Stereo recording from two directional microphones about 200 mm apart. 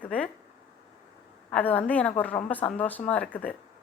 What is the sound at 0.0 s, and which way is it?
Speech, 5° left (ahead or behind).